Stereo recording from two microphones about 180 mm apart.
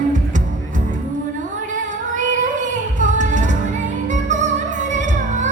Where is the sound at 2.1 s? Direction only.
45° right (ahead or behind).